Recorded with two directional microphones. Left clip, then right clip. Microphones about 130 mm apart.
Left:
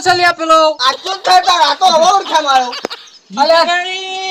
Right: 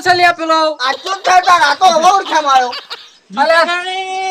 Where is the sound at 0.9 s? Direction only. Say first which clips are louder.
Even; centre (ahead or behind).